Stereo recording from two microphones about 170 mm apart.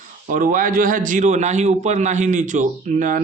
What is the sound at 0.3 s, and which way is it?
A man's voice, 50° right (ahead or behind).